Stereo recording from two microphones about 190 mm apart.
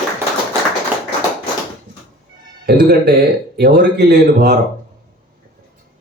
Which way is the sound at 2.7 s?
55° right (ahead or behind).